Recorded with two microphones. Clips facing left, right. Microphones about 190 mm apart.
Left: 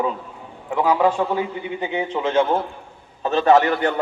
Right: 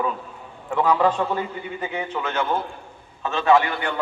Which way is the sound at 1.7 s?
20° left (ahead or behind).